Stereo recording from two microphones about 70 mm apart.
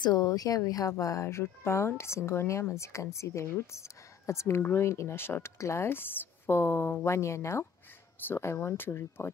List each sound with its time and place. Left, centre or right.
0.0 s speech: left
0.3 s speech: left